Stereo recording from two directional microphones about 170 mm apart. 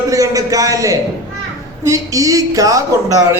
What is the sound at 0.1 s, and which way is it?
A man's voice, 20° right (ahead or behind).